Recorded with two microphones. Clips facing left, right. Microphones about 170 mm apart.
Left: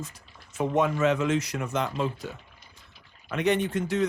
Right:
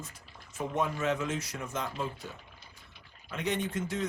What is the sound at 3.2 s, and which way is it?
Speech, 65° left (ahead or behind).